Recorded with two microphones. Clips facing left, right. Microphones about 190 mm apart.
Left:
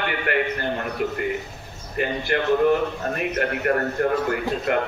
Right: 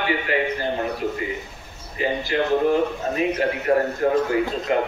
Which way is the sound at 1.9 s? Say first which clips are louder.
Right 1 dB; 60° left (ahead or behind).